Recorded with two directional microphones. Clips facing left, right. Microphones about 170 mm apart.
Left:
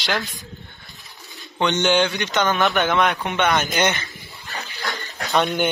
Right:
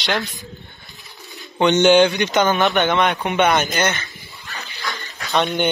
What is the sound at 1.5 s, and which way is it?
Speech, 15° right (ahead or behind).